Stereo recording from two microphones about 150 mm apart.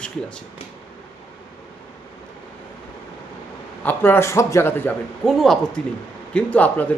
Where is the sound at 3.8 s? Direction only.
15° left (ahead or behind).